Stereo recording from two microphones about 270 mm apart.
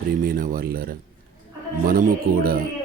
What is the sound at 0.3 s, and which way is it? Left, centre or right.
Speech, right.